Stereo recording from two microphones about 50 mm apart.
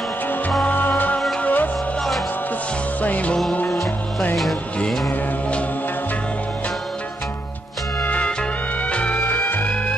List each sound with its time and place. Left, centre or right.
0.7 s music: left
3.0 s music: left
8.0 s music: left
9.2 s music: left